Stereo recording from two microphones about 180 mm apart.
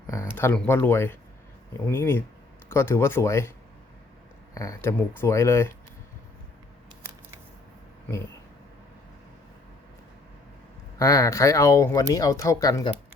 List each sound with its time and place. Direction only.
0.1 s speech: 15° left (ahead or behind)
4.5 s speech: 20° left (ahead or behind)
10.9 s speech: 20° left (ahead or behind)